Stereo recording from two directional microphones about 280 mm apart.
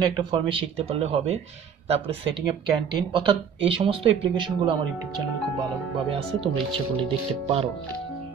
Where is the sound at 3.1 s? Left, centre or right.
Centre.